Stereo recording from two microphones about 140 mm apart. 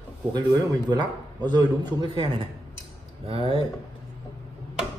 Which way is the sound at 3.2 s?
45° right (ahead or behind).